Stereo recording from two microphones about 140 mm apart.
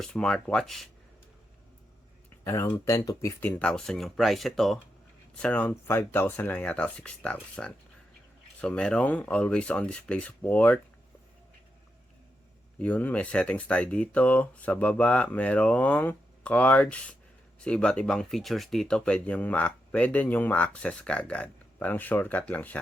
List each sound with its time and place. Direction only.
0.0 s speech: 5° left (ahead or behind)
2.4 s speech: 20° left (ahead or behind)
3.6 s speech: 5° left (ahead or behind)
12.8 s speech: 10° left (ahead or behind)